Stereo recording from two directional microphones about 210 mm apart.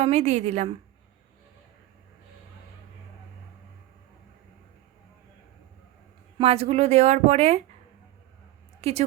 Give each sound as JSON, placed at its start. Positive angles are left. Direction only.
{"t": 0.0, "sound": "speech", "side_deg": -30}
{"t": 6.4, "sound": "speech", "side_deg": -30}
{"t": 8.8, "sound": "a woman's voice", "side_deg": -30}